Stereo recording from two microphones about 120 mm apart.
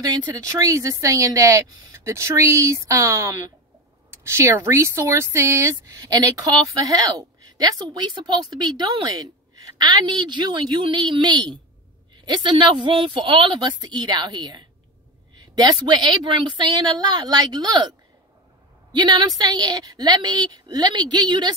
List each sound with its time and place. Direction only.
0.0 s speech: 35° right (ahead or behind)
18.9 s speech: 40° right (ahead or behind)